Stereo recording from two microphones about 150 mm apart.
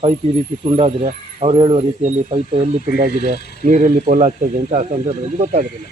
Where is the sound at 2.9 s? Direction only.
70° right (ahead or behind).